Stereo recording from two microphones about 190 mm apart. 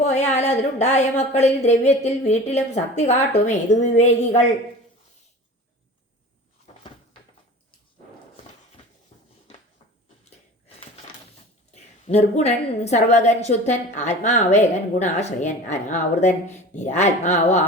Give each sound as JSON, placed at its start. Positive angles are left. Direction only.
{"t": 0.0, "sound": "a woman's voice", "side_deg": 35}
{"t": 11.7, "sound": "a woman's voice", "side_deg": 35}